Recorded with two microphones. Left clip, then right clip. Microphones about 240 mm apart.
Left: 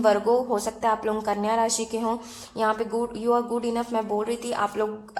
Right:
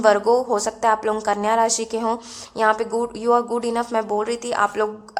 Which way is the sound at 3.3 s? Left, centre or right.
Right.